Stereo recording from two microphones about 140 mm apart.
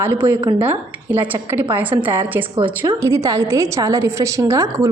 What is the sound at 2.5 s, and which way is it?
Speech, 35° right (ahead or behind).